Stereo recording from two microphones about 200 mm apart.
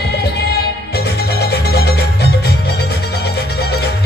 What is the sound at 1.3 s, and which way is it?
Music, 55° left (ahead or behind).